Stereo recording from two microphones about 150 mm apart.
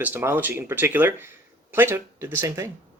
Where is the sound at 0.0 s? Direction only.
15° right (ahead or behind).